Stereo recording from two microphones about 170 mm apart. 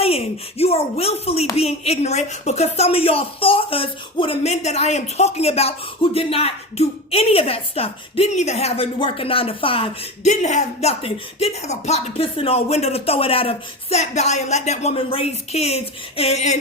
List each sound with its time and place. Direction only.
0.0 s a woman's voice: 35° left (ahead or behind)